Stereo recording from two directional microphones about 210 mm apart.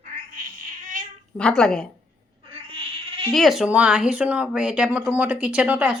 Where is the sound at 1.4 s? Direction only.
5° left (ahead or behind).